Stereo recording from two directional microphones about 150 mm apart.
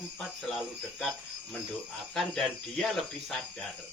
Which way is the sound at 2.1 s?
Centre (ahead or behind).